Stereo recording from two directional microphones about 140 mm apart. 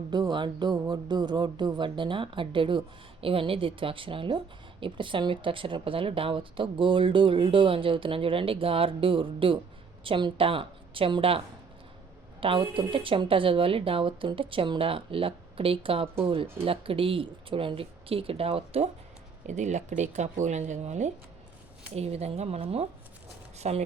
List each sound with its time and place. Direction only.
0.1 s speech: 30° right (ahead or behind)
19.5 s speech: 55° right (ahead or behind)